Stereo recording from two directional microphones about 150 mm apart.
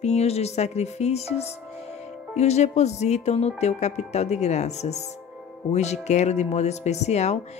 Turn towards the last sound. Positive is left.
turn(degrees=45)  # may be behind; listen again after turning